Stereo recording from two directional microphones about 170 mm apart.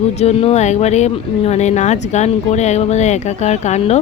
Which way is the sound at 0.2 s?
40° left (ahead or behind).